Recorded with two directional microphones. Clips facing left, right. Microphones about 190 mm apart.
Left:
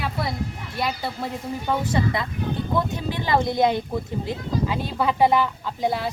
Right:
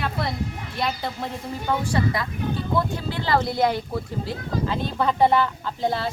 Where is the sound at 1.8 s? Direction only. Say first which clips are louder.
Even; 20° left (ahead or behind).